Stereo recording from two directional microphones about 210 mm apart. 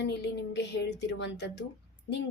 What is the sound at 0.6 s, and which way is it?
Speech, 55° left (ahead or behind).